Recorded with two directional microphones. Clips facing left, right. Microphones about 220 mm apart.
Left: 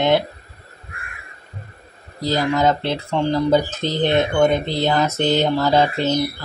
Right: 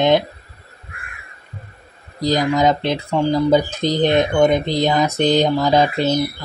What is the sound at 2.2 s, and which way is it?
Speech, 15° right (ahead or behind).